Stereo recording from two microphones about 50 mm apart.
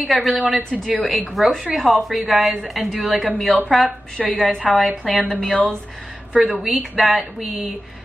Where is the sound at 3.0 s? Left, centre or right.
Centre.